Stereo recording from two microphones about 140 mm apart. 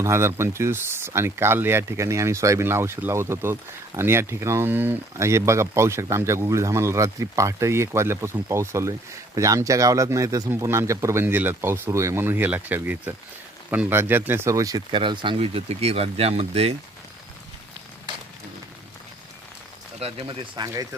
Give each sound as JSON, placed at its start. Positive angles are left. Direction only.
{"t": 0.0, "sound": "speech", "side_deg": -20}
{"t": 14.9, "sound": "speech", "side_deg": -35}
{"t": 20.0, "sound": "speech", "side_deg": -40}